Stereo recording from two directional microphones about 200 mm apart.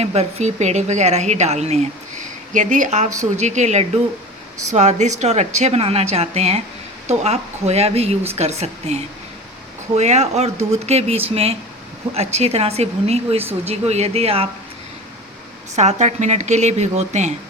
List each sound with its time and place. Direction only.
0.0 s a woman's voice: 30° right (ahead or behind)
15.7 s a woman's voice: 35° right (ahead or behind)